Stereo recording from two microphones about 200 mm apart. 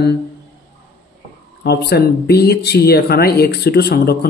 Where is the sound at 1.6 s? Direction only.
55° left (ahead or behind).